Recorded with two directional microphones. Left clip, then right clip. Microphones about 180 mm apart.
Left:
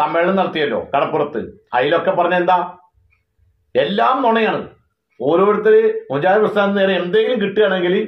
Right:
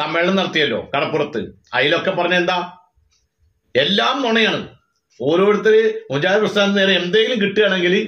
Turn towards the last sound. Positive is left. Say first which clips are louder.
# even
turn(degrees=-15)  # may be behind; listen again after turning